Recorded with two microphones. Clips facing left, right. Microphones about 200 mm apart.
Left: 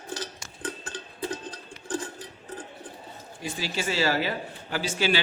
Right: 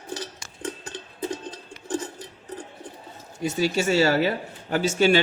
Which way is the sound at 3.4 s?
45° right (ahead or behind).